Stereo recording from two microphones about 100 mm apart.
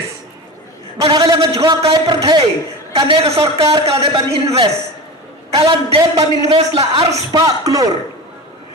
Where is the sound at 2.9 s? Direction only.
65° right (ahead or behind).